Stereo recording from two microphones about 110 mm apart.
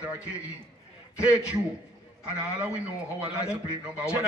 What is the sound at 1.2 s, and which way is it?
Speech, 10° right (ahead or behind).